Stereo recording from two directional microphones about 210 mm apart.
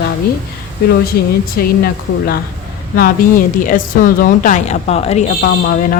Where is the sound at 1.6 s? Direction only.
45° left (ahead or behind); by 5.2 s 30° left (ahead or behind).